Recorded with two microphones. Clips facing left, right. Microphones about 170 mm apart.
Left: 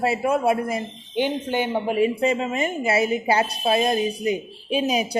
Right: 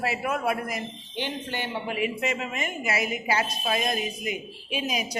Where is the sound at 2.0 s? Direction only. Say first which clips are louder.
Left 8 dB; 30° left (ahead or behind).